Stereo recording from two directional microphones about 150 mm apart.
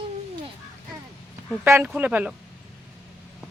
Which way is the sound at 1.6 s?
15° right (ahead or behind).